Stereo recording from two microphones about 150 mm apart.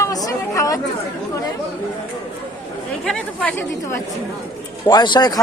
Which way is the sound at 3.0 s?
5° left (ahead or behind).